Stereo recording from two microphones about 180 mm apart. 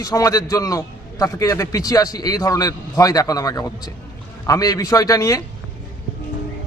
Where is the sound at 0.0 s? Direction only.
20° left (ahead or behind).